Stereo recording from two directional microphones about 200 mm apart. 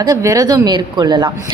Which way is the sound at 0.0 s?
20° right (ahead or behind).